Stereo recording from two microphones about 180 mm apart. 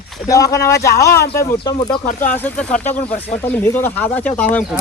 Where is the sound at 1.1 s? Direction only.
60° left (ahead or behind).